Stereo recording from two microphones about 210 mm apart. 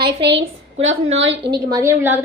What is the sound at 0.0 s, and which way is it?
Speech, 55° right (ahead or behind).